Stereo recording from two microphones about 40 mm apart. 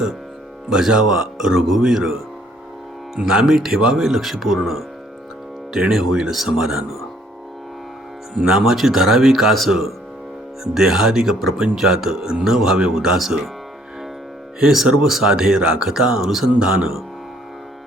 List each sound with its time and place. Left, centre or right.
0.7 s speech: centre
3.2 s speech: right; by 4.8 s centre
5.9 s speech: centre
8.4 s speech: centre
14.6 s speech: centre
15.3 s speech: centre